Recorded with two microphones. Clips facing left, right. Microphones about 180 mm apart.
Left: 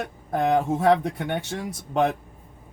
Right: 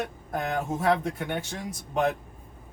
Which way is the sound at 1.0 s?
65° left (ahead or behind).